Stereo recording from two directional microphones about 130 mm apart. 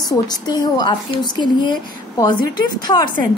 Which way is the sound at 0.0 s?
30° left (ahead or behind).